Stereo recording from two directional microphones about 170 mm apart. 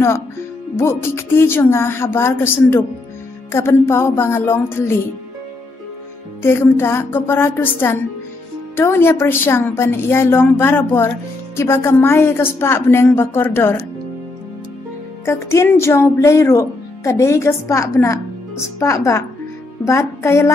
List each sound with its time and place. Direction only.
0.7 s a woman's voice: 15° left (ahead or behind)
6.4 s a woman's voice: 15° left (ahead or behind)
15.2 s a woman's voice: 15° left (ahead or behind)